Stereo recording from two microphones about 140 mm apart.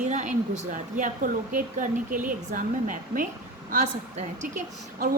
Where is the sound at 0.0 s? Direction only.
65° right (ahead or behind).